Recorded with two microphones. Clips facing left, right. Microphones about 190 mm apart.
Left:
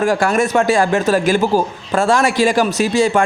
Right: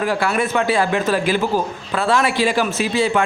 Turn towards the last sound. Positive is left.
turn(degrees=45)  # may be behind; listen again after turning